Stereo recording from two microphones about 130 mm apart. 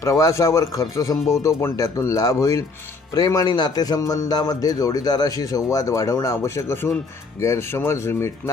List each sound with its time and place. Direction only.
0.0 s a man's voice: 25° left (ahead or behind)